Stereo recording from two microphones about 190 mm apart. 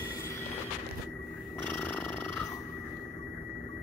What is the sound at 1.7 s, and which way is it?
Purr, 10° left (ahead or behind).